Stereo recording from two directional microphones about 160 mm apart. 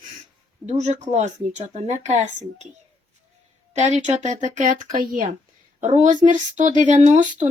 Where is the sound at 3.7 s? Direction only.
45° right (ahead or behind); by 5.3 s 60° right (ahead or behind).